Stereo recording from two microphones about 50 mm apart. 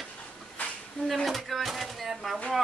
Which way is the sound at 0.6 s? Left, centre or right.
Left.